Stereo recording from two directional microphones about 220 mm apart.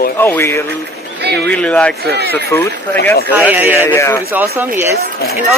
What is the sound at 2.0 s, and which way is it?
Speech, 45° right (ahead or behind).